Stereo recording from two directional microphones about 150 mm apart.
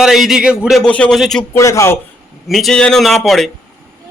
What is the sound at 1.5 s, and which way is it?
Speech, 20° left (ahead or behind).